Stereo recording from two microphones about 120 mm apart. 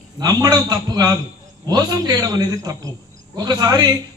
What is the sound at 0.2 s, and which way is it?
A man's voice, 35° right (ahead or behind).